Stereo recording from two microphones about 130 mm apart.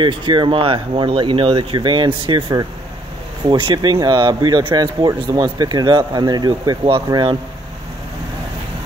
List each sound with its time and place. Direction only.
0.0 s speech: 35° right (ahead or behind)